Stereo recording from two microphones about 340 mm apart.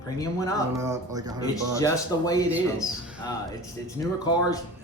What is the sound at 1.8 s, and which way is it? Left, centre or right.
Speech, centre.